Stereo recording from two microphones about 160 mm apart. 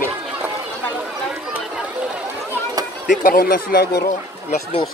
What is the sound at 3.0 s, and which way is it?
Speech, 65° left (ahead or behind).